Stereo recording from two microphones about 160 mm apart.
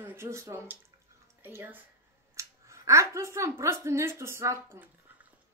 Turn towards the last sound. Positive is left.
turn(degrees=-20)  # may be behind; listen again after turning